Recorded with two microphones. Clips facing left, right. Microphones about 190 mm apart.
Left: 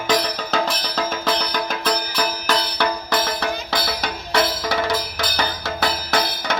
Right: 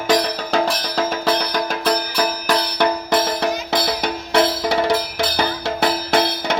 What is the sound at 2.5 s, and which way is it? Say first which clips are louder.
Music: right 4 dB; 15° right (ahead or behind).